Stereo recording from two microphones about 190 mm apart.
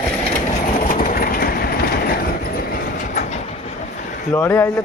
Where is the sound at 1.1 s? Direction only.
50° left (ahead or behind).